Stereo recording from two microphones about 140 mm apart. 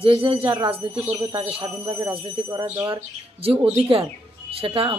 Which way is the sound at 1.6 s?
25° right (ahead or behind).